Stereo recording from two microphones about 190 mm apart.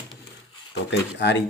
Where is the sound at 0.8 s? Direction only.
65° left (ahead or behind).